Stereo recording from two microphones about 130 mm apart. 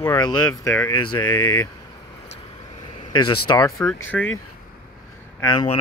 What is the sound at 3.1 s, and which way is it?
Speech, 30° left (ahead or behind).